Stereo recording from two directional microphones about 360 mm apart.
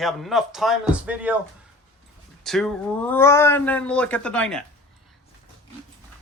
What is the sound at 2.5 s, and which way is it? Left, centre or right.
Speech, centre.